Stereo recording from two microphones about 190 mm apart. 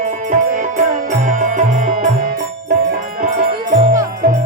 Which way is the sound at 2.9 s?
45° right (ahead or behind).